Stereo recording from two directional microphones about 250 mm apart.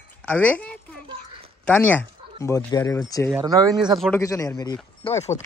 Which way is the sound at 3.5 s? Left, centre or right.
Centre.